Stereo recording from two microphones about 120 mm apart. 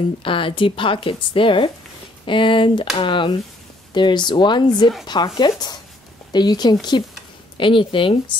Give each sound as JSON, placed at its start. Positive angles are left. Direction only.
{"t": 0.2, "sound": "speech", "side_deg": 45}